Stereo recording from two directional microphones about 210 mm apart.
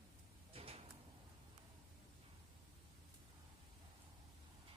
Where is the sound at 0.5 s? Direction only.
25° right (ahead or behind).